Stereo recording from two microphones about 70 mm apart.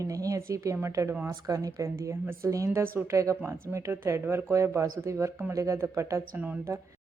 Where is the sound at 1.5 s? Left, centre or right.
Right.